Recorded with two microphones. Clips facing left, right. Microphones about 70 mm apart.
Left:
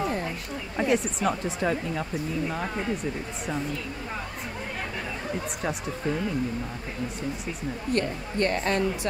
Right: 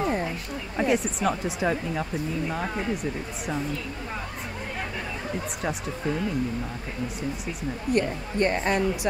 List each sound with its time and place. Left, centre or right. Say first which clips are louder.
0.0 s a sound: right 2 dB; centre
0.7 s speech: right 1 dB; centre
5.6 s speech: even; centre
7.9 s a woman's voice: right 3 dB; centre